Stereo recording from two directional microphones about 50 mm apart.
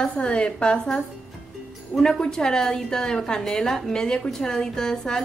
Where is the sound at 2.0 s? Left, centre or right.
Centre.